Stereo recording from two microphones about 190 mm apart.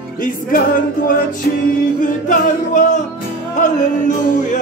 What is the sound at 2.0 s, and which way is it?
Music, 40° left (ahead or behind).